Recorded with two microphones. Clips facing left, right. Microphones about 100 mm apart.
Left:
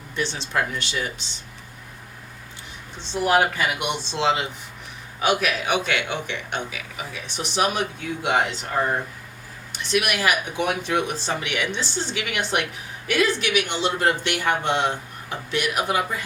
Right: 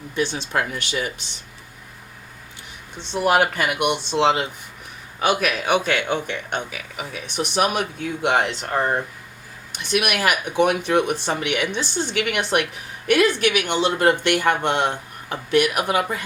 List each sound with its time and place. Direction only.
0.5 s speech: 55° right (ahead or behind)
3.1 s speech: 60° right (ahead or behind)